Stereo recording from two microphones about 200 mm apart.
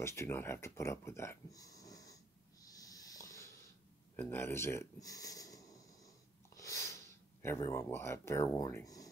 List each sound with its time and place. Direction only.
0.0 s speech: 15° left (ahead or behind)
2.6 s a sound: 20° left (ahead or behind)
4.2 s speech: 10° left (ahead or behind)
6.5 s snort: 15° left (ahead or behind)
7.4 s speech: 15° left (ahead or behind)